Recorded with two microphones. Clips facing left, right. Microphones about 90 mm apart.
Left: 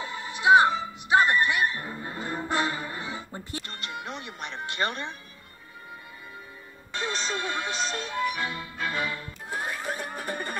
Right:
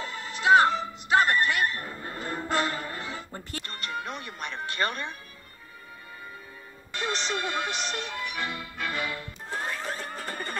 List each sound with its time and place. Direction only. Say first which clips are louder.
0.0 s music: left 2 dB; 15° left (ahead or behind)
7.0 s speech: even; 25° left (ahead or behind)
8.3 s music: left 2 dB; 25° left (ahead or behind)
9.5 s a sound: left 1 dB; 10° left (ahead or behind)